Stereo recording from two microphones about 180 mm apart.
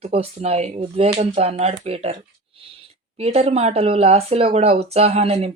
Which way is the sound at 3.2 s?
35° right (ahead or behind).